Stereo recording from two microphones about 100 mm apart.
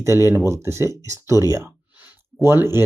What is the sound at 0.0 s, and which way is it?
Speech, 30° right (ahead or behind).